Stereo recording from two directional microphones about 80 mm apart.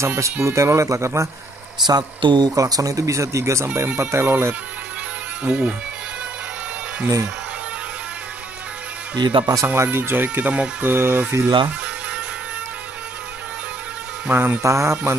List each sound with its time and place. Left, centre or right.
0.0 s speech: right
1.9 s speech: right
2.5 s speech: right
5.4 s speech: centre
9.1 s speech: right
9.8 s speech: right
10.5 s speech: centre
10.9 s speech: right
14.3 s speech: right